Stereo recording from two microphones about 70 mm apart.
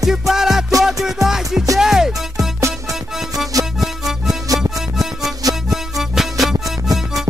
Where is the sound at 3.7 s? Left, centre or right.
Centre.